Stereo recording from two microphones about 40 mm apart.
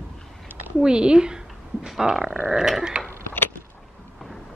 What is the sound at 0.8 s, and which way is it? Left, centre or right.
Speech, right.